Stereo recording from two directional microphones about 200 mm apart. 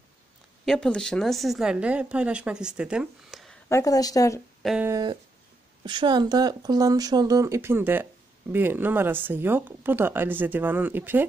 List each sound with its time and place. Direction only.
0.7 s a woman's voice: 5° left (ahead or behind)
3.6 s speech: 15° left (ahead or behind)
4.6 s a woman's voice: 5° right (ahead or behind)
4.9 s speech: 20° right (ahead or behind)